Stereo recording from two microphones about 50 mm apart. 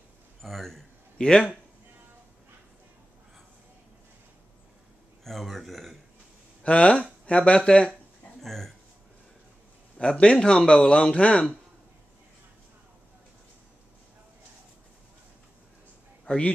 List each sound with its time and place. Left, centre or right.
0.4 s a man's voice: centre
1.1 s a man's voice: centre
5.2 s a sound: centre
6.6 s speech: left
8.4 s a sound: centre
9.9 s speech: left
16.3 s a man's voice: left